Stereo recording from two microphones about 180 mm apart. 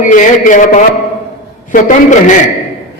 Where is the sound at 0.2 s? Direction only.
45° left (ahead or behind).